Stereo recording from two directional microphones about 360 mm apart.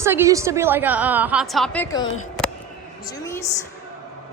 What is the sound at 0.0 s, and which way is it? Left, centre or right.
A woman's voice, centre.